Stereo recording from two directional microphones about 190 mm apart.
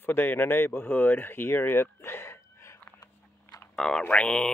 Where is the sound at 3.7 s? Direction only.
5° left (ahead or behind).